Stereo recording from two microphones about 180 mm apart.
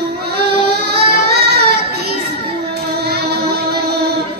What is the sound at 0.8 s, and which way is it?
Child singing, 65° right (ahead or behind).